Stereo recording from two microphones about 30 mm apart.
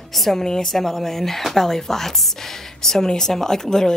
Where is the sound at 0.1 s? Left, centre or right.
Centre.